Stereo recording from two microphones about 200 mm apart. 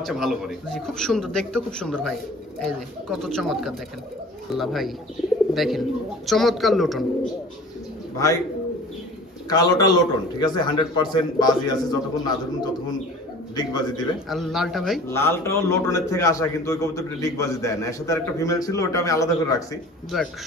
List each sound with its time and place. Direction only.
0.0 s a man's voice: centre (ahead or behind)
9.5 s a man's voice: 20° left (ahead or behind)
14.3 s a man's voice: centre (ahead or behind)
15.0 s a man's voice: 10° left (ahead or behind)
20.1 s a man's voice: centre (ahead or behind)